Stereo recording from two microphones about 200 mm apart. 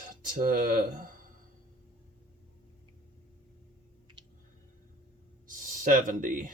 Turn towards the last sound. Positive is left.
turn(degrees=-40)  # may be behind; listen again after turning